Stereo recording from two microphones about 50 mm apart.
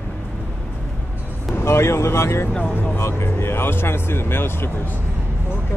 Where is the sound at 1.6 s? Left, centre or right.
Left.